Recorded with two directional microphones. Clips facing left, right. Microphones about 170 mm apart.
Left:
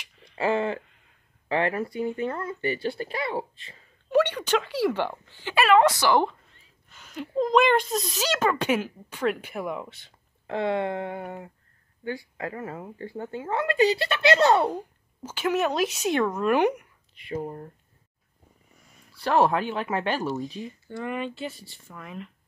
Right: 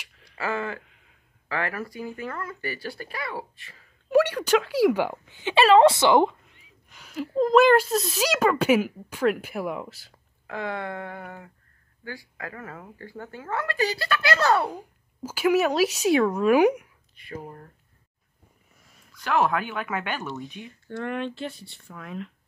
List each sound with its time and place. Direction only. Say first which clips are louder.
0.4 s speech: left 5 dB; 25° left (ahead or behind)
0.8 s a sound: right 2 dB; centre (ahead or behind)
1.5 s speech: left 5 dB; 25° left (ahead or behind)
4.1 s a woman's voice: right 2 dB; 5° right (ahead or behind)
5.5 s a woman's voice: right 3 dB; 30° right (ahead or behind); by 10.1 s 5° right (ahead or behind)
10.4 s speech: left 5 dB; 30° left (ahead or behind)
15.2 s a woman's voice: right 4 dB; 10° right (ahead or behind)
17.2 s speech: left 6 dB; 25° left (ahead or behind)
19.1 s speech: left 2 dB; 35° left (ahead or behind)
20.8 s speech: right 2 dB; centre (ahead or behind)